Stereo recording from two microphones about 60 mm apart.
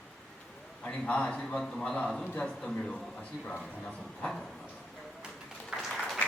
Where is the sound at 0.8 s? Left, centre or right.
Left.